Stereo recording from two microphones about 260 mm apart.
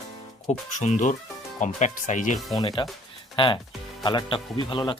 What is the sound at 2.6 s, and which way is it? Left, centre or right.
Speech, centre.